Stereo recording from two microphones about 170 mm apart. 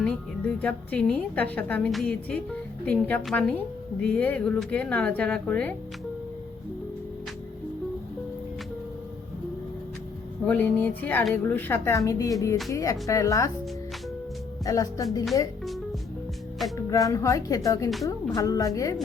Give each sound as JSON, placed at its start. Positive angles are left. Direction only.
{"t": 0.0, "sound": "a woman's voice", "side_deg": 5}
{"t": 10.4, "sound": "a woman's voice", "side_deg": 10}
{"t": 14.6, "sound": "speech", "side_deg": 20}
{"t": 15.6, "sound": "music", "side_deg": 0}
{"t": 16.7, "sound": "speech", "side_deg": 20}